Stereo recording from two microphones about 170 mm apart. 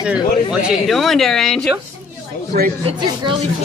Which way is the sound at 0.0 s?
5° right (ahead or behind).